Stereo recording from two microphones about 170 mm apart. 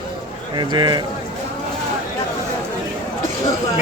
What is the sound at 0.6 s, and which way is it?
Speech, 25° right (ahead or behind).